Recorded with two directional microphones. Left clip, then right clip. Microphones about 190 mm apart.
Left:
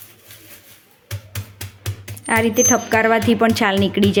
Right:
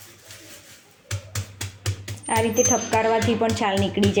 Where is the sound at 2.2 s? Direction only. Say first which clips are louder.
Left 4 dB; 25° left (ahead or behind).